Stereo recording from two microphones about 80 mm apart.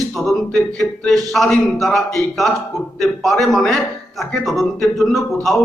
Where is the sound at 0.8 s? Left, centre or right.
Centre.